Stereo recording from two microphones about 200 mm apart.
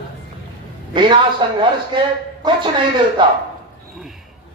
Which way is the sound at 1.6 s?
25° right (ahead or behind).